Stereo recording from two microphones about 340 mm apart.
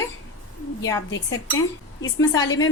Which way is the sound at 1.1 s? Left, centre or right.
Left.